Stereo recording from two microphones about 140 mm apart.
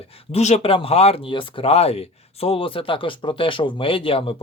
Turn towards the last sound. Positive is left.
turn(degrees=40)  # may be behind; listen again after turning